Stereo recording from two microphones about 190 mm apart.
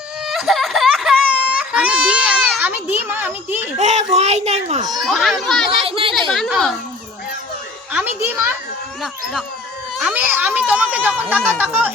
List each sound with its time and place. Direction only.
0.3 s baby cry: centre (ahead or behind)
3.8 s a child's voice: 35° right (ahead or behind)
4.9 s a child's voice: centre (ahead or behind)
5.8 s a sound: 30° right (ahead or behind)
6.1 s a child's voice: centre (ahead or behind)
7.9 s speech: 10° right (ahead or behind)
10.0 s speech: 10° right (ahead or behind)